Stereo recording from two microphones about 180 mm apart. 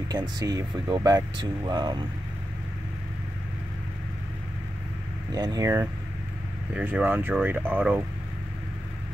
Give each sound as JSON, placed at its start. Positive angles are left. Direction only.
{"t": 0.1, "sound": "speech", "side_deg": -25}
{"t": 5.3, "sound": "speech", "side_deg": -20}